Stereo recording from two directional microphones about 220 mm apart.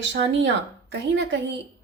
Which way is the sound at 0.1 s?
55° right (ahead or behind).